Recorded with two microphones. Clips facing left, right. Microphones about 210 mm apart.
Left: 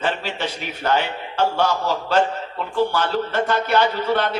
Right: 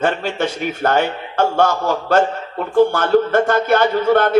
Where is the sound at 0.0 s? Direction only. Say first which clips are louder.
Right 6 dB; 50° right (ahead or behind).